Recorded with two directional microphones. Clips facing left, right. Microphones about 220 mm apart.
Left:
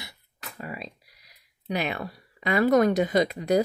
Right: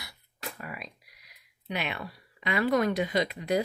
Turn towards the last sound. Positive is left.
turn(degrees=40)  # may be behind; listen again after turning